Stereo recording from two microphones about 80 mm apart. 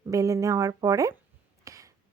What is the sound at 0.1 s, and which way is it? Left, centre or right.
Speech, right.